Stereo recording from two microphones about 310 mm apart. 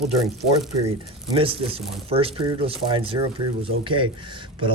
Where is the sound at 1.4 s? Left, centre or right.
Centre.